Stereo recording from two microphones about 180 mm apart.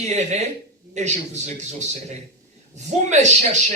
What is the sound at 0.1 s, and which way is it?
A man's voice, 40° right (ahead or behind).